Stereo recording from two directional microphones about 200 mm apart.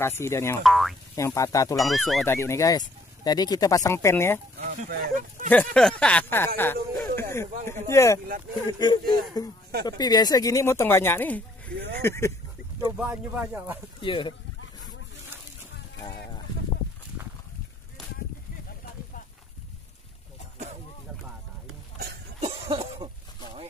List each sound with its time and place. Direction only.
0.0 s speech: 15° left (ahead or behind)
0.7 s speech: centre (ahead or behind)
1.1 s speech: 15° left (ahead or behind)
1.8 s speech: centre (ahead or behind)
2.2 s speech: 15° left (ahead or behind)
4.6 s speech: 35° right (ahead or behind)
5.5 s speech: 5° left (ahead or behind)
12.9 s speech: 5° right (ahead or behind)
14.0 s speech: 25° left (ahead or behind)
21.9 s a sound: 55° right (ahead or behind)
22.4 s a sound: 30° right (ahead or behind)